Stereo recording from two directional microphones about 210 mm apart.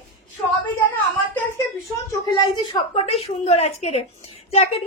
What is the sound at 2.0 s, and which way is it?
A woman's voice, 20° left (ahead or behind).